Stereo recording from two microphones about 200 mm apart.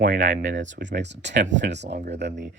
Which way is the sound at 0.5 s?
65° right (ahead or behind).